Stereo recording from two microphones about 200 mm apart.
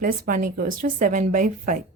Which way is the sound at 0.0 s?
40° right (ahead or behind).